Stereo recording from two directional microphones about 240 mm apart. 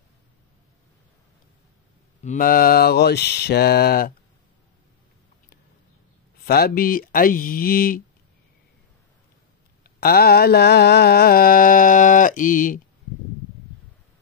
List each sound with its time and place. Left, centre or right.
2.2 s mantra: left
6.4 s mantra: left
9.8 s mantra: left